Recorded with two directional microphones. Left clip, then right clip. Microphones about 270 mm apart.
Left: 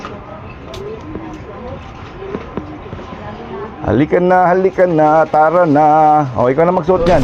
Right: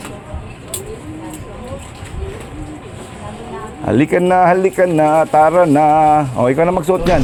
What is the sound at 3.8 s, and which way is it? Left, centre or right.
Speech, right.